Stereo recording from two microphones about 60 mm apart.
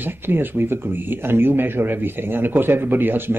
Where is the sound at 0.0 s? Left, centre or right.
Right.